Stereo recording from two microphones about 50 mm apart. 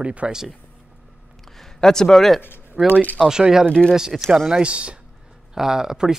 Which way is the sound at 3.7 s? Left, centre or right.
Centre.